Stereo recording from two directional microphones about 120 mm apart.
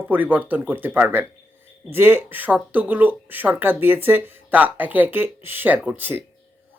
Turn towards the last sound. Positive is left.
turn(degrees=-15)  # may be behind; listen again after turning